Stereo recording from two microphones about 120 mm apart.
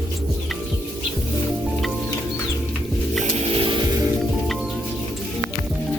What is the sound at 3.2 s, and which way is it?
Music, 60° right (ahead or behind).